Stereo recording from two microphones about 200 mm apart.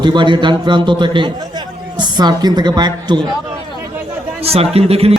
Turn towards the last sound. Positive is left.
turn(degrees=-30)  # may be behind; listen again after turning